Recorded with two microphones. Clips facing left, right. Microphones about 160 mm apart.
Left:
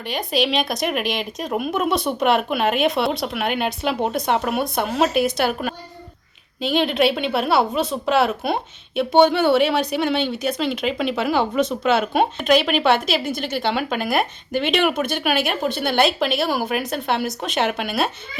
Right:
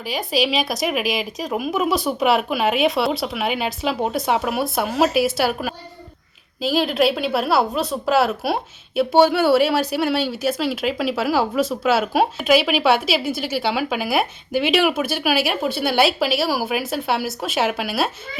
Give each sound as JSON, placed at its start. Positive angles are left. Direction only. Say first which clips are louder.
{"t": 0.0, "sound": "a woman's voice", "louder": "even", "side_deg": 0}